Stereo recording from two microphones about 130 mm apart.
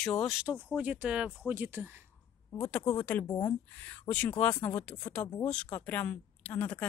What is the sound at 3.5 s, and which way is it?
Speech, 10° left (ahead or behind).